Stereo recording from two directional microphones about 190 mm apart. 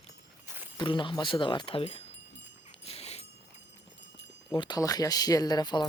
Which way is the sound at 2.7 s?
30° left (ahead or behind).